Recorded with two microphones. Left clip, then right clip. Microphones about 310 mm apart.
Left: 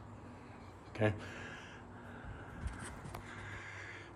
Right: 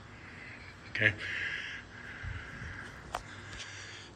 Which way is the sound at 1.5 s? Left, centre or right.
Left.